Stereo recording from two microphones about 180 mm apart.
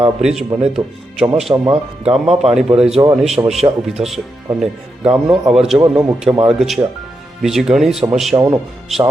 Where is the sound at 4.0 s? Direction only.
5° right (ahead or behind).